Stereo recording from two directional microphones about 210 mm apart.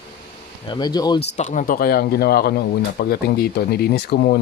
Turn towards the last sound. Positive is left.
turn(degrees=50)  # may be behind; listen again after turning